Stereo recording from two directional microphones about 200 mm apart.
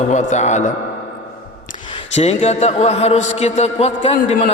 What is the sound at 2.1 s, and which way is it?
A man's voice, 30° left (ahead or behind).